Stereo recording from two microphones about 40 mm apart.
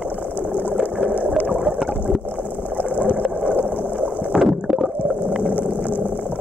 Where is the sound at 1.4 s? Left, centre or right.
Centre.